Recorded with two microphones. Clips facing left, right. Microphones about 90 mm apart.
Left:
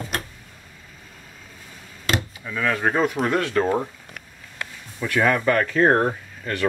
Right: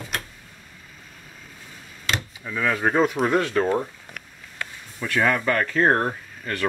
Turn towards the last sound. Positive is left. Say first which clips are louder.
# left 2 dB
turn(degrees=5)  # may be behind; listen again after turning